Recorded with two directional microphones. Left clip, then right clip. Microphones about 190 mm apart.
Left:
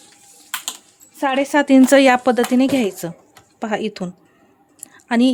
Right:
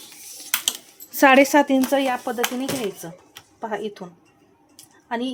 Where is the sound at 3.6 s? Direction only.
65° left (ahead or behind).